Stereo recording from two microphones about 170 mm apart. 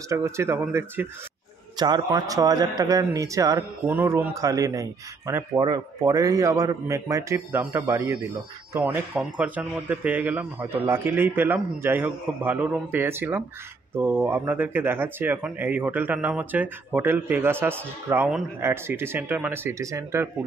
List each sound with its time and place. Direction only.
0.1 s a man's voice: 15° right (ahead or behind)